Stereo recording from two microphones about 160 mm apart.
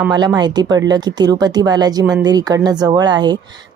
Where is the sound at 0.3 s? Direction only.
25° right (ahead or behind).